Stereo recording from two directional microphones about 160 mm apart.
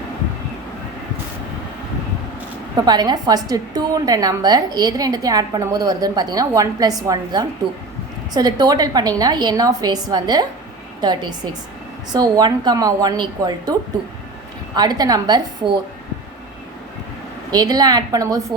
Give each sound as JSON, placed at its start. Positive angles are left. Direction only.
{"t": 2.7, "sound": "a woman's voice", "side_deg": -25}
{"t": 14.8, "sound": "a woman's voice", "side_deg": -25}
{"t": 17.5, "sound": "a woman's voice", "side_deg": -25}